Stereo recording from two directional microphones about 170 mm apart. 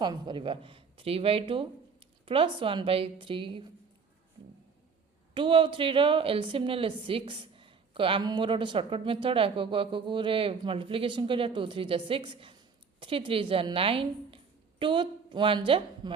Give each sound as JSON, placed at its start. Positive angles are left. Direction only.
{"t": 0.0, "sound": "a woman's voice", "side_deg": -25}
{"t": 5.3, "sound": "a woman's voice", "side_deg": -30}